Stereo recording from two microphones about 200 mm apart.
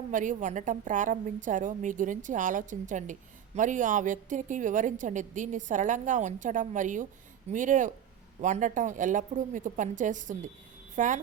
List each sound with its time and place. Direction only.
0.1 s a woman's voice: 40° right (ahead or behind)